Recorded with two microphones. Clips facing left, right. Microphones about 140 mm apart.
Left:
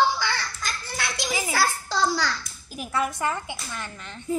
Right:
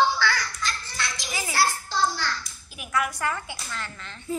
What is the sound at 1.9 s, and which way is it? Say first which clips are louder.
Speech: left 2 dB; 90° left.